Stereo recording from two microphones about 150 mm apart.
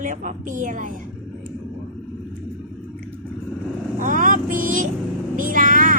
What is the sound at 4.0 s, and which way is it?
Vehicle, 60° right (ahead or behind).